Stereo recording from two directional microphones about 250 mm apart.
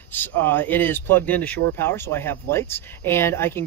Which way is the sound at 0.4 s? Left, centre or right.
Centre.